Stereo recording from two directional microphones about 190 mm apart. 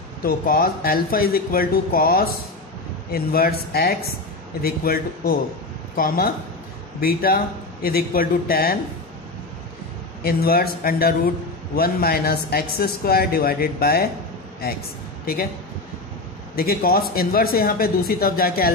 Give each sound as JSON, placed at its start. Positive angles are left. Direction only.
{"t": 0.2, "sound": "a man's voice", "side_deg": 50}
{"t": 10.2, "sound": "a man's voice", "side_deg": 55}
{"t": 16.5, "sound": "a man's voice", "side_deg": 50}